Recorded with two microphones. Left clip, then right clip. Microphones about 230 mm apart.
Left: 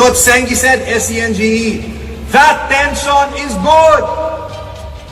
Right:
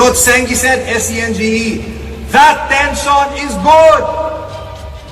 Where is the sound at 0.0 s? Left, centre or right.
Centre.